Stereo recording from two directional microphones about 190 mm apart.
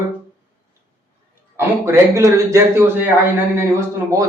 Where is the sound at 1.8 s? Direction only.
15° right (ahead or behind).